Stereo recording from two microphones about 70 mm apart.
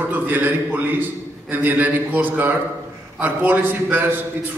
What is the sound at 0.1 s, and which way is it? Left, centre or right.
A man's voice, right.